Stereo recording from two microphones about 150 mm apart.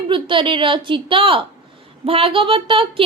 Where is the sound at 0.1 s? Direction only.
35° right (ahead or behind).